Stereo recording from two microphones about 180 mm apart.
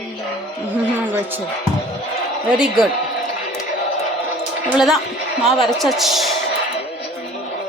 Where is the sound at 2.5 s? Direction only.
5° right (ahead or behind).